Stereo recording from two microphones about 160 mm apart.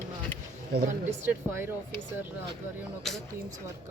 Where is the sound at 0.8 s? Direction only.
50° right (ahead or behind).